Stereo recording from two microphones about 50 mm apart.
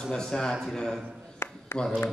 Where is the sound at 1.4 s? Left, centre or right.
Left.